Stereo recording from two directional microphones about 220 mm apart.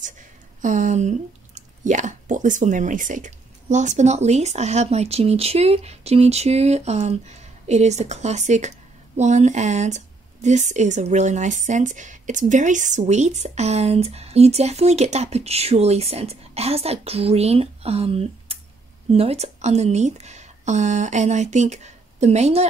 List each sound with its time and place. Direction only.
0.6 s speech: 35° right (ahead or behind)